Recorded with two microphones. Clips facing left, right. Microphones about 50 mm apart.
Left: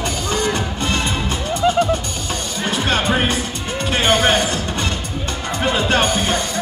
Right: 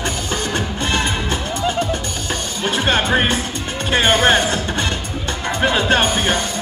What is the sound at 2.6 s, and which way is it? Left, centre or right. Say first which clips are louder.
Music: right 1 dB; right.